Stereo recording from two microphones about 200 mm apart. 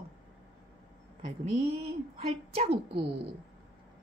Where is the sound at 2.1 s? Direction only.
30° right (ahead or behind).